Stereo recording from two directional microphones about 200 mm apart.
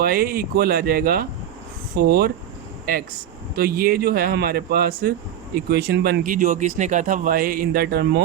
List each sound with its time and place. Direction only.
0.0 s speech: 50° right (ahead or behind)
3.5 s speech: 50° right (ahead or behind)